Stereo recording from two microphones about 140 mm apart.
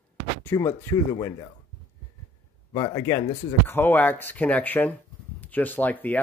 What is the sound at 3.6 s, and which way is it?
Speech, 15° left (ahead or behind).